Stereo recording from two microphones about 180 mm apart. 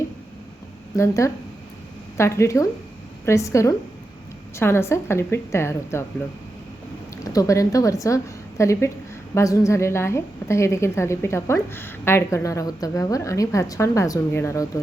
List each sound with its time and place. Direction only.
0.9 s a woman's voice: 15° left (ahead or behind)
7.3 s a woman's voice: 20° left (ahead or behind)